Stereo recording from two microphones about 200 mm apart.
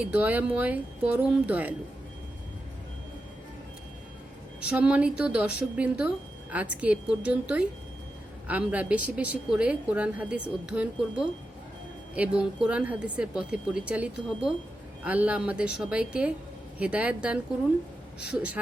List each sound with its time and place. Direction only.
0.0 s a woman's voice: 10° right (ahead or behind)
4.6 s a woman's voice: 5° right (ahead or behind)